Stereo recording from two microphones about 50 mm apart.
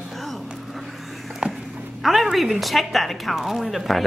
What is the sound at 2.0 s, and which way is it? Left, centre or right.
A woman's voice, centre.